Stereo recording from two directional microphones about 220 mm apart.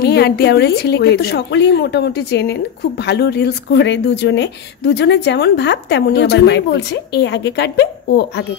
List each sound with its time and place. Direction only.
0.0 s speech: 45° left (ahead or behind)